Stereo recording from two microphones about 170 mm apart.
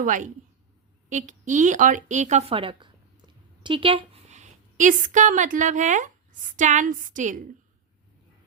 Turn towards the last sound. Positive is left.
turn(degrees=-50)  # may be behind; listen again after turning